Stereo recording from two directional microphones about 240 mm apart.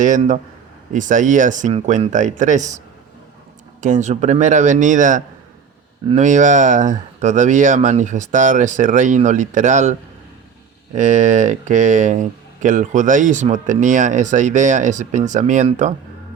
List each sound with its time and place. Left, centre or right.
0.0 s speech: right
10.9 s speech: right